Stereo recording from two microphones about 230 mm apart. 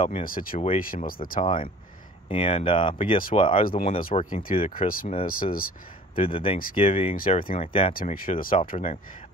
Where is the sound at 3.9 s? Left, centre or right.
Left.